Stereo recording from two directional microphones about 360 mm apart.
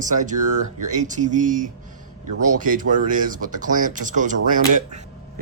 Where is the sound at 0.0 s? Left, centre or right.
Right.